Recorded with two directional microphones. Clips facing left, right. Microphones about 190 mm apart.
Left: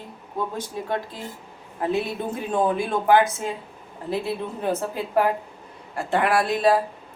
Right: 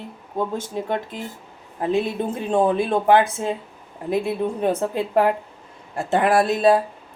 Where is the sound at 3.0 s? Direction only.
25° right (ahead or behind).